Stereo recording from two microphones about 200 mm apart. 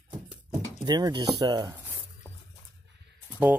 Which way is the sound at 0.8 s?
20° right (ahead or behind).